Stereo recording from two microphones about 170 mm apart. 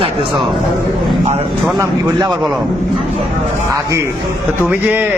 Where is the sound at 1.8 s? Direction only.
25° right (ahead or behind).